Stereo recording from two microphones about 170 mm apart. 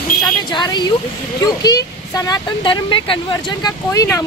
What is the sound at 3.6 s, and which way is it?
Speech, 20° left (ahead or behind).